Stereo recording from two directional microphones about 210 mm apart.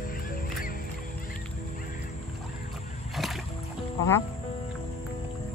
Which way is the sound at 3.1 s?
Centre (ahead or behind).